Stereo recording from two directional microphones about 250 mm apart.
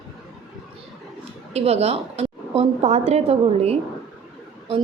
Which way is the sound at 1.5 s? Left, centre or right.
Right.